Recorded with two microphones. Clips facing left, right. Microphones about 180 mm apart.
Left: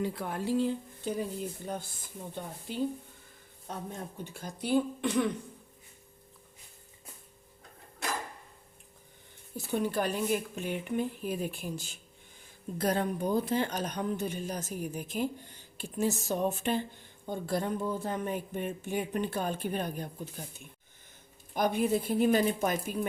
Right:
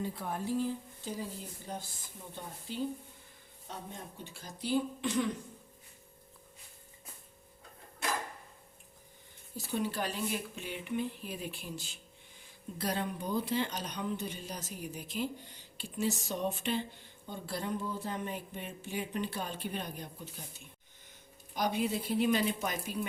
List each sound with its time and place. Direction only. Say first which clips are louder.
0.0 s speech: left 4 dB; 80° left; by 2.8 s 60° left (ahead or behind)
4.2 s speech: left 4 dB; 50° left (ahead or behind)
9.6 s speech: left 4 dB; 50° left (ahead or behind)
21.5 s speech: left 5 dB; 50° left (ahead or behind)